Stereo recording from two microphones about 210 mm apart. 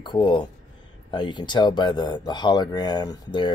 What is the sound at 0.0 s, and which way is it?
Speech, 20° left (ahead or behind).